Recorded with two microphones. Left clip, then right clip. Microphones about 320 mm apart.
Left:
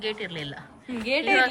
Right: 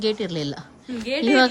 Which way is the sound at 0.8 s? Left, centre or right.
Centre.